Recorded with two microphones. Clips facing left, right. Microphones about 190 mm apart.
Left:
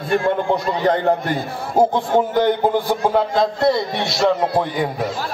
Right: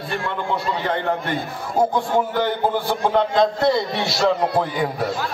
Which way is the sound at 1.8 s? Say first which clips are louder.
Left 3 dB; 20° left (ahead or behind).